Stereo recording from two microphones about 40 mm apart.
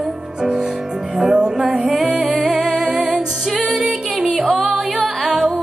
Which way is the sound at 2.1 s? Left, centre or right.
Centre.